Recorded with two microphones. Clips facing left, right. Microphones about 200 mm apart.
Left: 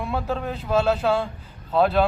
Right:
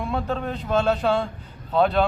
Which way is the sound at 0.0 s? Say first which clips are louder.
Even; 5° left (ahead or behind).